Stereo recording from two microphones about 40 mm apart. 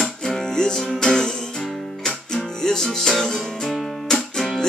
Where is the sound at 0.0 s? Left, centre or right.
Centre.